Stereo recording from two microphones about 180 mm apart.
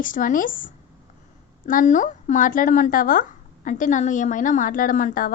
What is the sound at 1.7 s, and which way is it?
A woman's voice, 45° left (ahead or behind).